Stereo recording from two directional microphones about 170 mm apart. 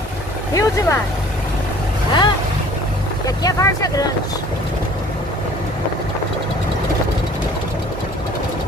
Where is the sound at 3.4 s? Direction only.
20° left (ahead or behind).